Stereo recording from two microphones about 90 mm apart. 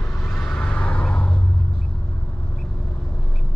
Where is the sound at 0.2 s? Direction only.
Centre (ahead or behind).